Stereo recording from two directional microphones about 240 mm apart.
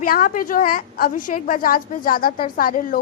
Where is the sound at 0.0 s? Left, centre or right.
Left.